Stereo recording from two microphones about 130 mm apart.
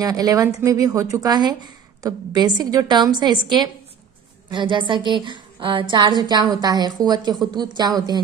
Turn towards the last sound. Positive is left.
turn(degrees=-35)  # may be behind; listen again after turning